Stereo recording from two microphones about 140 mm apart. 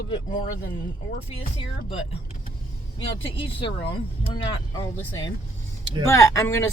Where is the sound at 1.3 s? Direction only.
40° left (ahead or behind).